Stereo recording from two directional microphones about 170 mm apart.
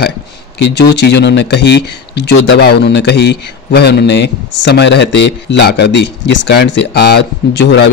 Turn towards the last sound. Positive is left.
turn(degrees=85)